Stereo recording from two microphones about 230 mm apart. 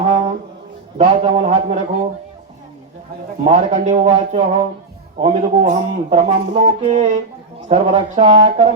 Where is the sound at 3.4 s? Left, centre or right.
Right.